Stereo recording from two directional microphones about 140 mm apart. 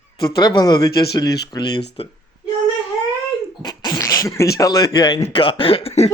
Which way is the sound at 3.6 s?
30° left (ahead or behind).